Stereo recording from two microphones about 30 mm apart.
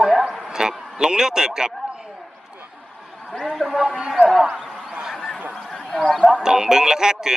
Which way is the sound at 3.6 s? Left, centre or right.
Left.